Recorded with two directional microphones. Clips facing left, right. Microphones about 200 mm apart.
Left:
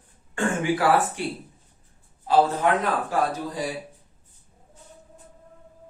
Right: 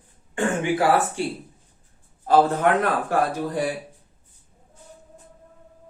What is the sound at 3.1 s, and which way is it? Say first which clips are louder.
Speech: right 2 dB; 65° right (ahead or behind).